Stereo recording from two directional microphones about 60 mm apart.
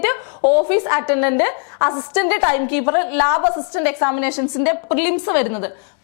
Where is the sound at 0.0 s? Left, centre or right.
Left.